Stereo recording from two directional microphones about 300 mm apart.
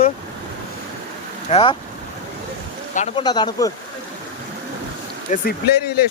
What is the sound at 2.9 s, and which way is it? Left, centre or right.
Speech, centre.